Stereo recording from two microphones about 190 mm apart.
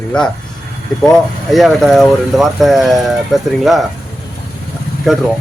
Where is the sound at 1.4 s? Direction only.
Centre (ahead or behind).